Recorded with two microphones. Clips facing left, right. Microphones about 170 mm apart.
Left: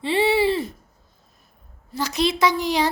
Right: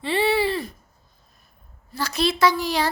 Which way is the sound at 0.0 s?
25° left (ahead or behind).